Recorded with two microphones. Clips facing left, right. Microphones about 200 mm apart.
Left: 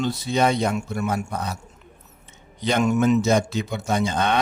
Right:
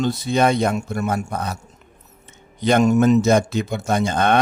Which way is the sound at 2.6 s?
50° right (ahead or behind).